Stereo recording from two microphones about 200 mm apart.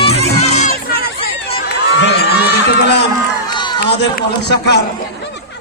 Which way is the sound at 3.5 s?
20° left (ahead or behind).